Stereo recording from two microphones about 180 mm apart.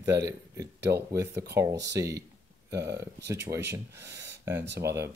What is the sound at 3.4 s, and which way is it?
Speech, 15° right (ahead or behind).